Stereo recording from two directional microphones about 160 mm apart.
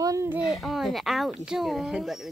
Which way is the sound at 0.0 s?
20° right (ahead or behind).